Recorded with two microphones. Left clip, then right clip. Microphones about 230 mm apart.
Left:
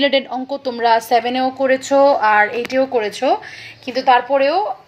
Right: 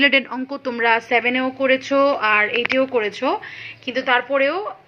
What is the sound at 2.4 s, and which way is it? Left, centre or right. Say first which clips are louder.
Speech: left 3 dB; left.